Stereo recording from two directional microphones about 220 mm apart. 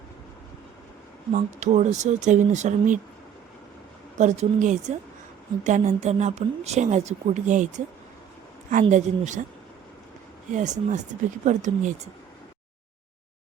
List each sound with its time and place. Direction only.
1.3 s a woman's voice: 30° right (ahead or behind)
4.2 s a woman's voice: 35° right (ahead or behind)
8.8 s a woman's voice: 35° right (ahead or behind)
10.5 s a woman's voice: 30° right (ahead or behind)